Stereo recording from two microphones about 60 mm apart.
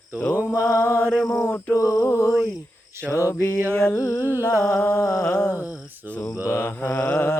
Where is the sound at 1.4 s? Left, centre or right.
Left.